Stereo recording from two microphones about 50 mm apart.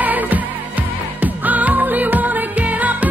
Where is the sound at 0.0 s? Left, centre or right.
Right.